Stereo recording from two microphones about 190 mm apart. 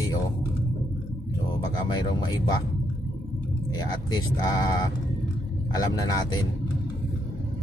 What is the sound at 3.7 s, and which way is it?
Speech, 20° left (ahead or behind).